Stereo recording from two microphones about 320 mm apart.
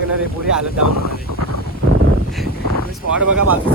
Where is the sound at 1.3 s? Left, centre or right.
Right.